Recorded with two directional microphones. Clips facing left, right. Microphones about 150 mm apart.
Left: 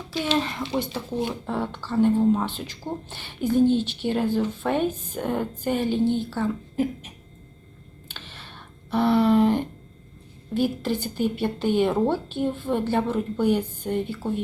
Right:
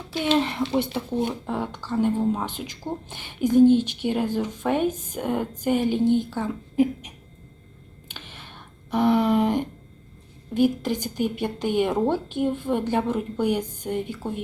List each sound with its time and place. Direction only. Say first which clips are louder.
0.3 s speech: right 4 dB; 20° right (ahead or behind)
8.1 s a sound: right 1 dB; 15° right (ahead or behind)
10.5 s speech: right 2 dB; 15° right (ahead or behind)